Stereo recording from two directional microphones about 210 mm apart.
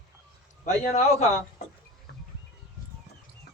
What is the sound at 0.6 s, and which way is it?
Speech, 35° left (ahead or behind).